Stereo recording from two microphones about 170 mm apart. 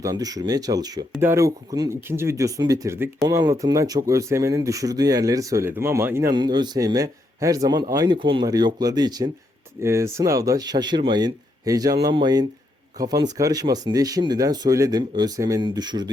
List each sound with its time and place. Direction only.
0.0 s speech: 20° right (ahead or behind)